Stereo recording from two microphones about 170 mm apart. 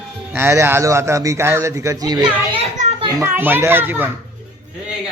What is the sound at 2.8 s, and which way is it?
Children playing, 45° right (ahead or behind).